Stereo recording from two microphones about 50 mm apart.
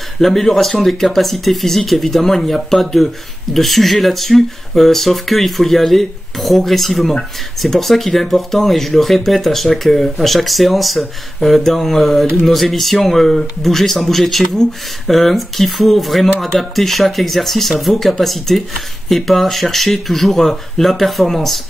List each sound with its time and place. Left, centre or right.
0.2 s speech: centre